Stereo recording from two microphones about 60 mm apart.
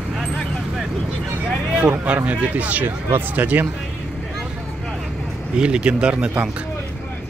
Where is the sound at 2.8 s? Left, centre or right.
Right.